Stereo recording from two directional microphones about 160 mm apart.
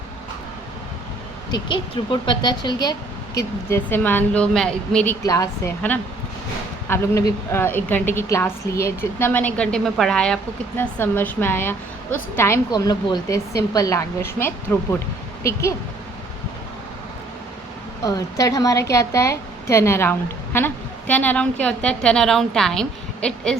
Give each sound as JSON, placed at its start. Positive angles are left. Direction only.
{"t": 1.5, "sound": "speech", "side_deg": 30}
{"t": 3.3, "sound": "a woman's voice", "side_deg": 15}
{"t": 5.2, "sound": "speech", "side_deg": 20}
{"t": 6.8, "sound": "a woman's voice", "side_deg": 15}
{"t": 18.0, "sound": "a woman's voice", "side_deg": 20}